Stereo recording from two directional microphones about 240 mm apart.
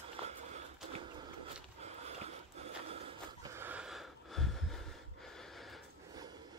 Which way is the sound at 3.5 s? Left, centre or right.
Centre.